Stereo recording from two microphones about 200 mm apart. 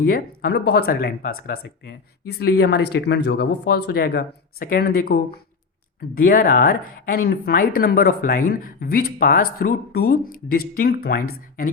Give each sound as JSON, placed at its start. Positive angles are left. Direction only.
{"t": 0.0, "sound": "speech", "side_deg": 50}